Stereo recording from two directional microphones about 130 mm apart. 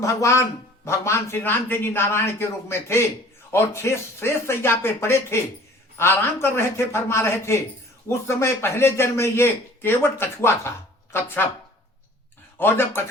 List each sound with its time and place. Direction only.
0.0 s a man's voice: 25° left (ahead or behind)
12.5 s speech: 15° left (ahead or behind)